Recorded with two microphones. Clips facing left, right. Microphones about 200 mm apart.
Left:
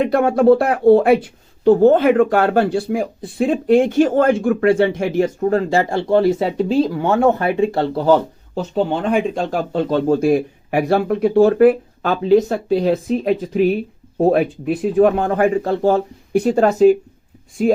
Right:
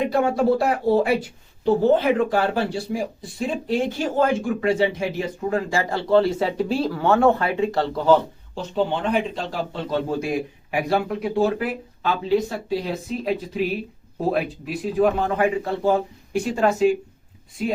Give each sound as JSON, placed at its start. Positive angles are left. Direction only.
{"t": 0.0, "sound": "speech", "side_deg": 60}
{"t": 5.9, "sound": "speech", "side_deg": 15}
{"t": 8.5, "sound": "speech", "side_deg": 40}
{"t": 16.5, "sound": "speech", "side_deg": 40}